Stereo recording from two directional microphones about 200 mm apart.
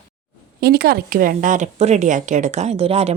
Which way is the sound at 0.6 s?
50° right (ahead or behind).